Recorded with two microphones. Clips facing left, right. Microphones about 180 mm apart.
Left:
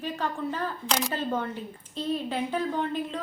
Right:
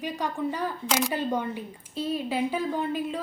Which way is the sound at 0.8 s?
Centre (ahead or behind).